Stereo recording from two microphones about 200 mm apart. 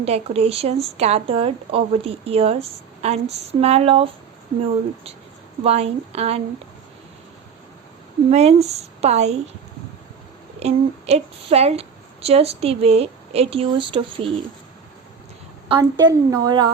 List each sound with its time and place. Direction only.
0.0 s speech: 30° right (ahead or behind)
5.6 s a woman's voice: 30° right (ahead or behind)
8.3 s a woman's voice: 35° right (ahead or behind)
10.6 s a woman's voice: 30° right (ahead or behind)
15.7 s speech: 20° right (ahead or behind)